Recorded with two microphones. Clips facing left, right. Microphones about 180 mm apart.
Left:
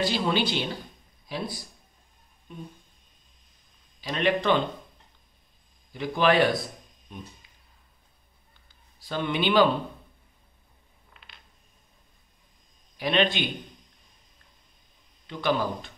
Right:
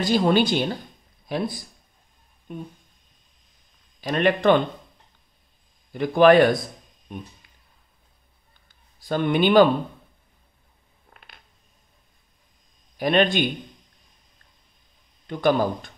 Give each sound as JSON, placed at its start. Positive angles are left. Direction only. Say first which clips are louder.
{"t": 0.0, "sound": "speech", "louder": "right 6 dB", "side_deg": -45}
{"t": 2.5, "sound": "speech", "louder": "right 7 dB", "side_deg": -55}
{"t": 4.0, "sound": "speech", "louder": "right 5 dB", "side_deg": -55}
{"t": 5.9, "sound": "speech", "louder": "right 7 dB", "side_deg": -50}
{"t": 8.6, "sound": "a sound", "louder": "right 9 dB", "side_deg": -50}
{"t": 11.1, "sound": "a sound", "louder": "right 4 dB", "side_deg": -50}
{"t": 12.9, "sound": "speech", "louder": "right 5 dB", "side_deg": -50}
{"t": 15.2, "sound": "speech", "louder": "right 6 dB", "side_deg": -50}